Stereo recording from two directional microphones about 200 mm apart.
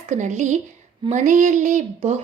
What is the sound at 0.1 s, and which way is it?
A woman's voice, 35° right (ahead or behind).